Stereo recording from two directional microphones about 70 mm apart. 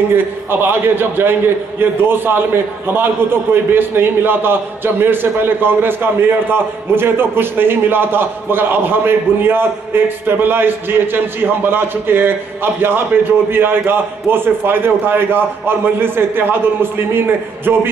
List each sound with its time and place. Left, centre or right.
0.1 s a man's voice: right